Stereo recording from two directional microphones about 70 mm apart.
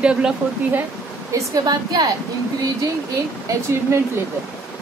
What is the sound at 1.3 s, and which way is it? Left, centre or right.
Speech, right.